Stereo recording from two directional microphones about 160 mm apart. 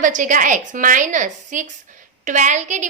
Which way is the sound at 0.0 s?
55° right (ahead or behind).